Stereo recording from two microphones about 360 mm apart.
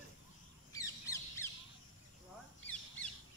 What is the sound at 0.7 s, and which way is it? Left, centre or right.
Bird, centre.